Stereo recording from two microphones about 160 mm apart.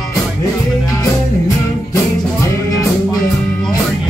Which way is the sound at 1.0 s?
20° left (ahead or behind).